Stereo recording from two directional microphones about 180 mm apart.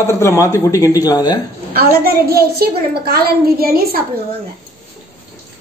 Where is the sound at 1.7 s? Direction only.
60° right (ahead or behind).